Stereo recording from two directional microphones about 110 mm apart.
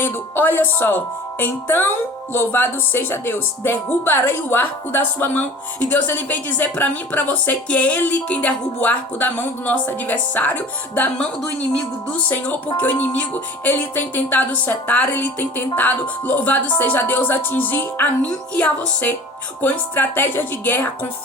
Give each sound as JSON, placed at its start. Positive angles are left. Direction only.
{"t": 0.0, "sound": "speech", "side_deg": 20}